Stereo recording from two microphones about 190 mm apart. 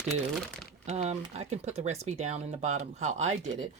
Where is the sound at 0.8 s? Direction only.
35° right (ahead or behind).